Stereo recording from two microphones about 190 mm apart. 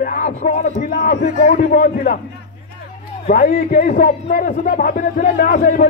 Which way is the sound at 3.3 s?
40° left (ahead or behind).